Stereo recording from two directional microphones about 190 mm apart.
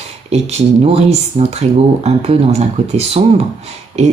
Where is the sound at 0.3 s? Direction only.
35° right (ahead or behind).